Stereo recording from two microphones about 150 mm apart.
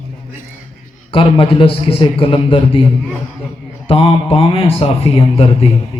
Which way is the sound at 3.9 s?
40° left (ahead or behind).